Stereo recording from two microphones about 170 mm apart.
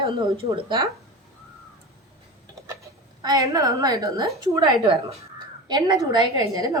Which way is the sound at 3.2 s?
20° right (ahead or behind).